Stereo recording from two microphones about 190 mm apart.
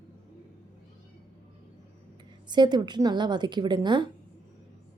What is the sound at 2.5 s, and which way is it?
A woman's voice, 25° right (ahead or behind).